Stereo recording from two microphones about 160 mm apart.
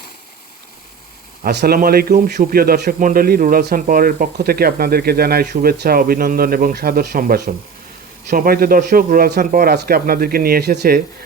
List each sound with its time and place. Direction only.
1.5 s a man's voice: 70° right (ahead or behind)